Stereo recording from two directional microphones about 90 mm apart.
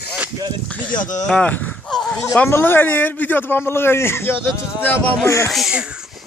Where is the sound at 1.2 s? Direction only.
10° left (ahead or behind).